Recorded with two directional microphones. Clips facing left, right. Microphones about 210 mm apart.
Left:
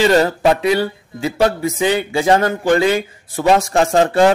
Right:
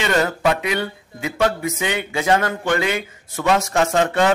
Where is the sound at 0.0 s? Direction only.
35° left (ahead or behind).